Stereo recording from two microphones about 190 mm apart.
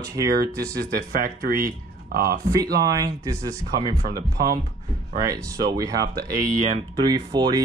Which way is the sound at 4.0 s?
50° right (ahead or behind).